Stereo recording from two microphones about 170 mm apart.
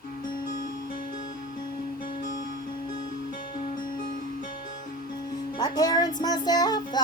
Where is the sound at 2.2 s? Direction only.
50° left (ahead or behind).